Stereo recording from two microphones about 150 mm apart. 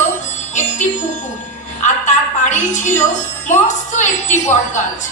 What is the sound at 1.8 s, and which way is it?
Music, 55° left (ahead or behind).